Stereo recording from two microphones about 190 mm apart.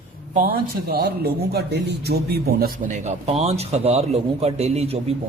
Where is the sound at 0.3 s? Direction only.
50° right (ahead or behind).